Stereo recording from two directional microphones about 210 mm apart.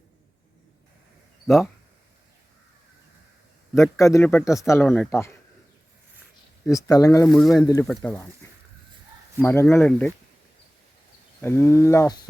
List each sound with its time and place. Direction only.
1.5 s speech: centre (ahead or behind)
3.8 s speech: 15° left (ahead or behind)
6.7 s speech: 15° left (ahead or behind)
7.3 s speech: centre (ahead or behind)
9.4 s speech: 10° left (ahead or behind)
11.3 s speech: 10° left (ahead or behind)